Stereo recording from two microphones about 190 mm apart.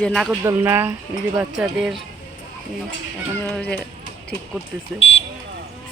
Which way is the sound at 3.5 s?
5° left (ahead or behind).